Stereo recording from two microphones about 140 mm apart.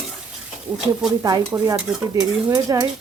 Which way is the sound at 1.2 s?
25° right (ahead or behind).